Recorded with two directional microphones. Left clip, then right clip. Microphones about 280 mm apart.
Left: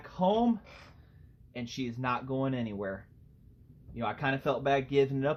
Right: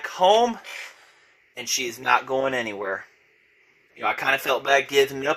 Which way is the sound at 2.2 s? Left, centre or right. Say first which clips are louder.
Right 10 dB; right.